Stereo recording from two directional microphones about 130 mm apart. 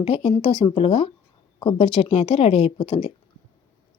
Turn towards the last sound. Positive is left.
turn(degrees=45)  # may be behind; listen again after turning